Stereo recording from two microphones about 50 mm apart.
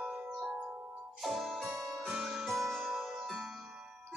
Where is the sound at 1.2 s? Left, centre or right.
Centre.